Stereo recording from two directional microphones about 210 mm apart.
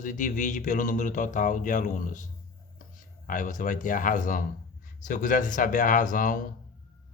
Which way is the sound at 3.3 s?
40° left (ahead or behind).